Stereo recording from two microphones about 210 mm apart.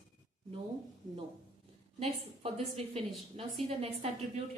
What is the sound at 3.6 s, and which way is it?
Speech, 30° right (ahead or behind).